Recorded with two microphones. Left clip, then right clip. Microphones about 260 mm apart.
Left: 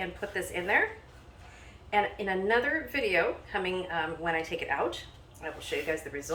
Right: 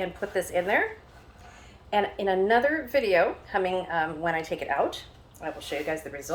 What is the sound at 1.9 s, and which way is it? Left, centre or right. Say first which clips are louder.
A woman's voice: right 3 dB; right.